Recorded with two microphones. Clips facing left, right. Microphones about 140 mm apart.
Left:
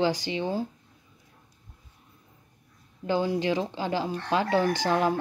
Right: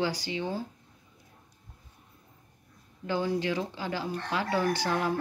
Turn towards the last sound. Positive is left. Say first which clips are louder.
# left 4 dB
turn(degrees=20)  # may be behind; listen again after turning